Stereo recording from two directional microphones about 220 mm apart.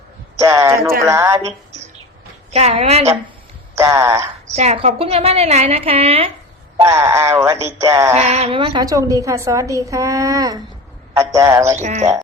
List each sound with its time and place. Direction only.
0.3 s a man's voice: 15° right (ahead or behind)
2.5 s a woman's voice: 30° right (ahead or behind)
3.8 s a woman's voice: 15° right (ahead or behind)
4.5 s a woman's voice: 30° right (ahead or behind)
6.8 s a woman's voice: 15° right (ahead or behind)
8.1 s a woman's voice: 30° right (ahead or behind)
11.8 s speech: 30° right (ahead or behind)